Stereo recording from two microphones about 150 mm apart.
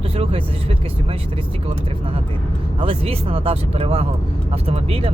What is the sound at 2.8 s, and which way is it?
Speech, 40° right (ahead or behind).